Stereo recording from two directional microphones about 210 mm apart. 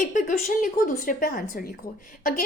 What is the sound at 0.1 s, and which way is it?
A woman's voice, 35° left (ahead or behind).